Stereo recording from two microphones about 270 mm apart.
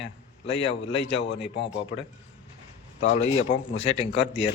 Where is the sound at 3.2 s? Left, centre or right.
Left.